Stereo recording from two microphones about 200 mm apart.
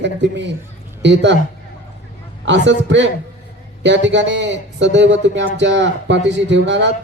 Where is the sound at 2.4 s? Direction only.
65° right (ahead or behind).